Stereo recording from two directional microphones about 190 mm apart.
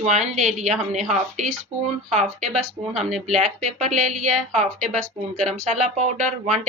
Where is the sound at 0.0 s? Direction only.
35° right (ahead or behind).